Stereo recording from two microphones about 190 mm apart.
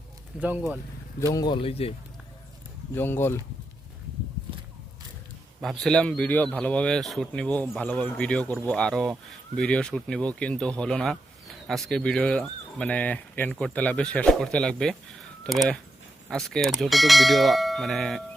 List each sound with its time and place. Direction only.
0.3 s speech: 10° right (ahead or behind)
1.2 s speech: 20° left (ahead or behind)
2.9 s speech: 10° left (ahead or behind)
5.6 s speech: centre (ahead or behind)